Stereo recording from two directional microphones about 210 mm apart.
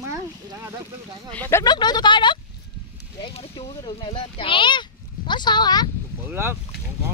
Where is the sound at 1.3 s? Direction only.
10° left (ahead or behind).